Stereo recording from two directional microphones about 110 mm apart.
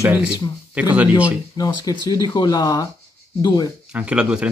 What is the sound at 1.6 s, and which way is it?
Speech, 35° left (ahead or behind).